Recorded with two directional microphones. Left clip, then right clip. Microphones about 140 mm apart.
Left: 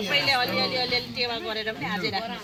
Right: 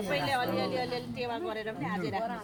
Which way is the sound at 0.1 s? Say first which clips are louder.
Left 7 dB; 15° right (ahead or behind).